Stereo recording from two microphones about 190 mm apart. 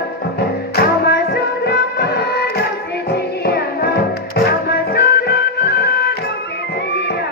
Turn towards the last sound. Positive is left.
turn(degrees=55)  # may be behind; listen again after turning